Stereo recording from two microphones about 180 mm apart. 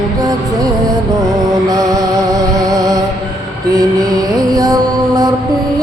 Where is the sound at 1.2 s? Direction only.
20° right (ahead or behind).